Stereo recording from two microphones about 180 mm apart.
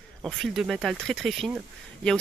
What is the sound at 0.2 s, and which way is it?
Speech, centre (ahead or behind).